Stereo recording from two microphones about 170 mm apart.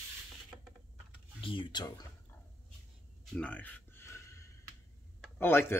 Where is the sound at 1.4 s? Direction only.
30° left (ahead or behind).